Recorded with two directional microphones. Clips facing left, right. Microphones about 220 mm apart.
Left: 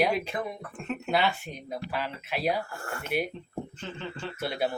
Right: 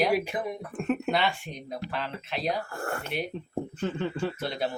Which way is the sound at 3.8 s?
55° right (ahead or behind).